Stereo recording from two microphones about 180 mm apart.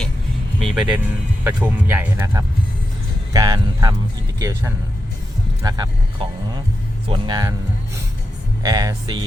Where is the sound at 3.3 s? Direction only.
20° right (ahead or behind).